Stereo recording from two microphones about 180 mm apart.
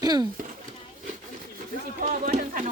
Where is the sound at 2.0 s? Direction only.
45° right (ahead or behind).